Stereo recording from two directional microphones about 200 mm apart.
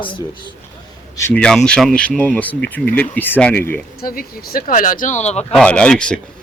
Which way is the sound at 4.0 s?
45° left (ahead or behind).